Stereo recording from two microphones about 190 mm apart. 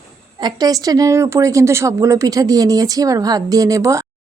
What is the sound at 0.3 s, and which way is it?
A woman's voice, 20° right (ahead or behind).